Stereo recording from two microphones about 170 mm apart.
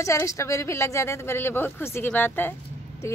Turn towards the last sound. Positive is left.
turn(degrees=15)  # may be behind; listen again after turning